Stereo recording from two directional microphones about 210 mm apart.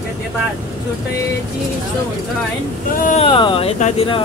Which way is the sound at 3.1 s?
25° left (ahead or behind).